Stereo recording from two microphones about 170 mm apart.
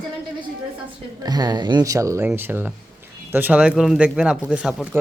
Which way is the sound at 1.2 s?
25° right (ahead or behind).